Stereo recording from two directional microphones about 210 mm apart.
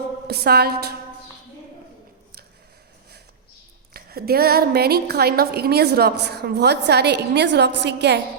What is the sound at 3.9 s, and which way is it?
A woman's voice, 45° right (ahead or behind).